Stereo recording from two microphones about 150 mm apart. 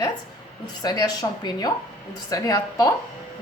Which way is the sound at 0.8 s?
25° left (ahead or behind).